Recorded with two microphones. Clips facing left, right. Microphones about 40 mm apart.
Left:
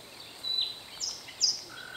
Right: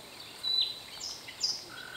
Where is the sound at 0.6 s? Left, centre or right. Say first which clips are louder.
Right 1 dB; right.